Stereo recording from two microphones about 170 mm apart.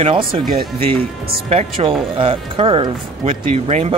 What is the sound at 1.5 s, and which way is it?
Speech, 35° right (ahead or behind).